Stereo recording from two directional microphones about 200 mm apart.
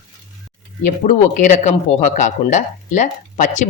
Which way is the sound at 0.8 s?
40° left (ahead or behind).